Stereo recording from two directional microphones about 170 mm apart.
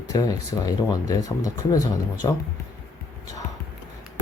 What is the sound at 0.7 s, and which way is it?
Speech, 20° left (ahead or behind).